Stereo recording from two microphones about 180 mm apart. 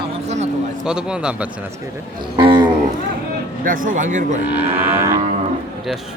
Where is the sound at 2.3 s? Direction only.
25° right (ahead or behind).